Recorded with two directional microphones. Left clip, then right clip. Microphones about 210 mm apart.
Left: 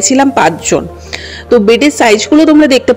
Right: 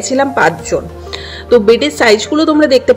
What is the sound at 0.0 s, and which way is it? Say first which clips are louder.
Speech: left 3 dB; 35° left (ahead or behind).